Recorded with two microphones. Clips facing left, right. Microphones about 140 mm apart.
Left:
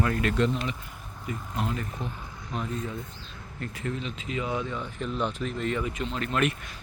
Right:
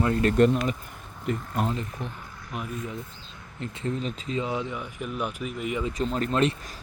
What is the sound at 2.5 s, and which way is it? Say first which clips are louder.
Speech: left 2 dB; 10° right (ahead or behind).